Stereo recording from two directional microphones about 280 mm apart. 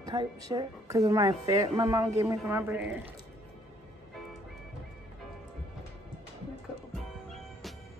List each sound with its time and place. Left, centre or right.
0.0 s a woman's voice: centre
7.0 s music: centre